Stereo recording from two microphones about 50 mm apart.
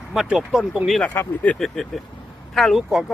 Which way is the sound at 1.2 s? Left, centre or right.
Left.